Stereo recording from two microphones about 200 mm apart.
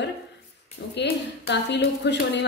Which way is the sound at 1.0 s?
60° left (ahead or behind).